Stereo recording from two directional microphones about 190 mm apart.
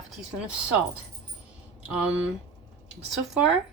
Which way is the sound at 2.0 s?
5° right (ahead or behind).